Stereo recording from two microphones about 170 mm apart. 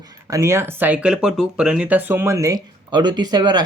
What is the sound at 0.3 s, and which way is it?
Speech, 15° right (ahead or behind).